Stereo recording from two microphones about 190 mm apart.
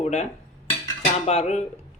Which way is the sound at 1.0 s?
35° left (ahead or behind).